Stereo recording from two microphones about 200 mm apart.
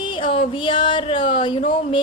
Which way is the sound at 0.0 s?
25° left (ahead or behind).